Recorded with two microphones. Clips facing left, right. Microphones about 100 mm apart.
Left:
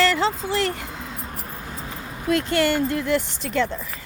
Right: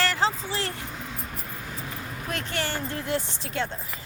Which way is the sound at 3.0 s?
75° left (ahead or behind).